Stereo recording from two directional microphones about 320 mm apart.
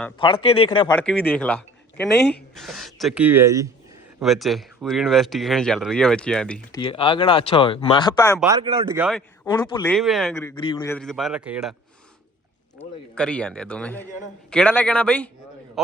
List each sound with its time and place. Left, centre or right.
0.4 s speech: centre
0.9 s speech: centre
8.5 s speech: centre
9.5 s speech: centre
12.8 s speech: centre